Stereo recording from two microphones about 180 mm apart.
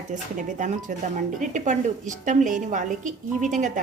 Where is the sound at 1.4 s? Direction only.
45° right (ahead or behind).